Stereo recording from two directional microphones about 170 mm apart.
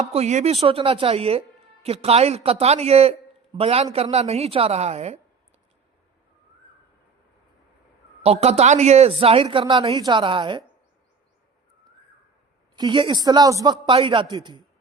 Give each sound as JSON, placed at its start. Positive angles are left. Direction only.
{"t": 0.0, "sound": "speech", "side_deg": -40}
{"t": 8.2, "sound": "speech", "side_deg": -35}
{"t": 12.7, "sound": "a man's voice", "side_deg": -25}